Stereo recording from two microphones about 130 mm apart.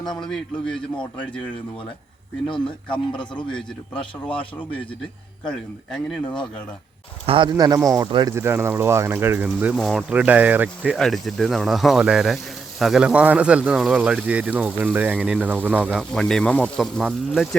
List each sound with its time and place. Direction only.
0.3 s speech: 5° left (ahead or behind)
3.5 s speech: 10° left (ahead or behind)
5.5 s speech: 5° left (ahead or behind)
6.2 s speech: 35° left (ahead or behind)
7.3 s speech: 40° right (ahead or behind)
7.5 s speech: 30° right (ahead or behind)
8.3 s speech: 20° right (ahead or behind)
9.7 s speech: centre (ahead or behind)
10.1 s speech: 10° right (ahead or behind)
10.9 s speech: centre (ahead or behind)
16.0 s speech: 5° left (ahead or behind)